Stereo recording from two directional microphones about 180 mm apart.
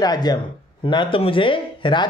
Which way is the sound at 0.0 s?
20° left (ahead or behind).